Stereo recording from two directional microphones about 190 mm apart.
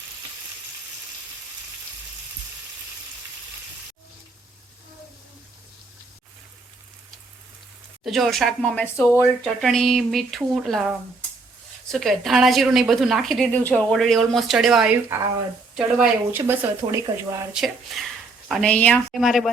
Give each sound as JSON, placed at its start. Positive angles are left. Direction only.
{"t": 8.0, "sound": "speech", "side_deg": 0}